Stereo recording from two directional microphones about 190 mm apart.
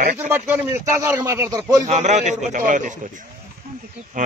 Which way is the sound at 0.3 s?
10° right (ahead or behind).